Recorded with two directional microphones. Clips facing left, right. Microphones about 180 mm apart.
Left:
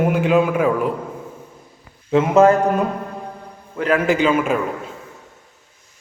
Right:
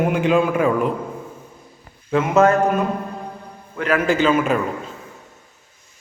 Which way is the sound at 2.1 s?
30° left (ahead or behind).